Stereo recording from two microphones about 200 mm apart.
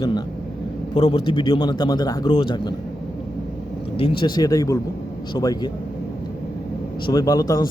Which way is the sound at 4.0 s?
25° left (ahead or behind).